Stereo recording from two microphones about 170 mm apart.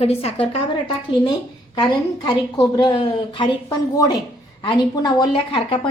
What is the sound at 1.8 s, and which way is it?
A woman's voice, 25° left (ahead or behind).